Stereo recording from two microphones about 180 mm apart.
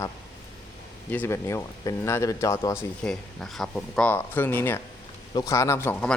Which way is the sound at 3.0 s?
5° left (ahead or behind).